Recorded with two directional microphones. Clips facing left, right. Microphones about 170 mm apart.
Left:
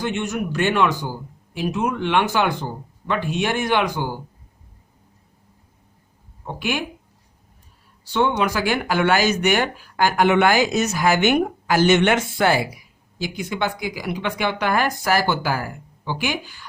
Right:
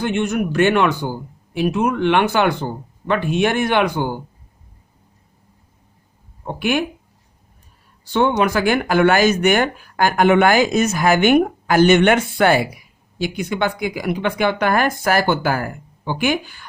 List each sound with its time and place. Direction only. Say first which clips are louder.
0.0 s speech: right 5 dB; 60° right (ahead or behind)
6.4 s speech: right 6 dB; 50° right (ahead or behind)
8.0 s speech: right 3 dB; 50° right (ahead or behind)